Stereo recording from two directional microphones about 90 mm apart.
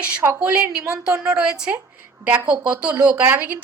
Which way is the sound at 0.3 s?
10° right (ahead or behind).